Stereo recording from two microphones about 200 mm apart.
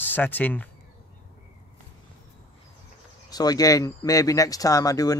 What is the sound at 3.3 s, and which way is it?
Speech, 20° left (ahead or behind).